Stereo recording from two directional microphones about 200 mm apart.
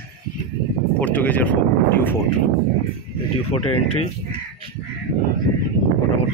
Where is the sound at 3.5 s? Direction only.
25° left (ahead or behind).